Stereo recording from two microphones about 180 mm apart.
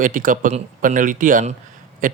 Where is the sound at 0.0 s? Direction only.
50° right (ahead or behind).